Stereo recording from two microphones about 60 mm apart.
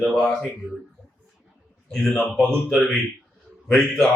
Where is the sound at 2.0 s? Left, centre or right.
Centre.